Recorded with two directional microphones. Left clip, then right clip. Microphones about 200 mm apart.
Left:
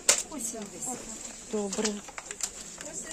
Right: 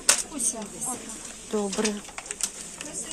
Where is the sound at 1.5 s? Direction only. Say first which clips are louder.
Right 4 dB; 15° left (ahead or behind).